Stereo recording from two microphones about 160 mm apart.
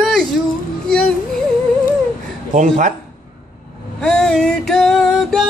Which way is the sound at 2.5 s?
55° right (ahead or behind).